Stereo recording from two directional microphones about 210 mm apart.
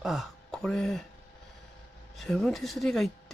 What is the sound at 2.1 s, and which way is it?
Speech, centre (ahead or behind).